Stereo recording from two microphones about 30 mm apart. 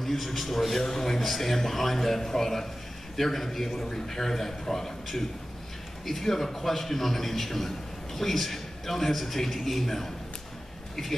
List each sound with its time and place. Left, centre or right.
0.0 s a man's voice: centre